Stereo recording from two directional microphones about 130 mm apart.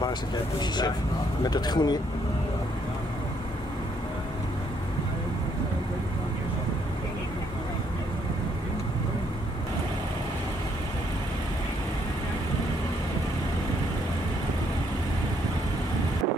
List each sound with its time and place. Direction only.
0.6 s speech: 30° left (ahead or behind)